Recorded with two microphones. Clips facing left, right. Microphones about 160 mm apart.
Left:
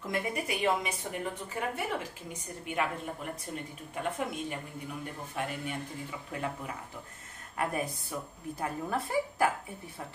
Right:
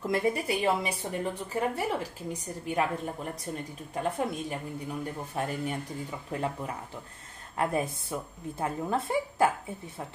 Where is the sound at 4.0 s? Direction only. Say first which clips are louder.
Right 4 dB; 35° right (ahead or behind).